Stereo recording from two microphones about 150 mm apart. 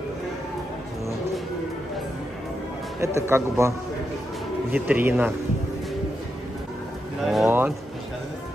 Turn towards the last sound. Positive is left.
turn(degrees=-15)  # may be behind; listen again after turning